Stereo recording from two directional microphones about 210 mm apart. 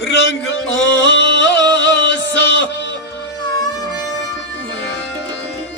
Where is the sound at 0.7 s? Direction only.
60° left (ahead or behind).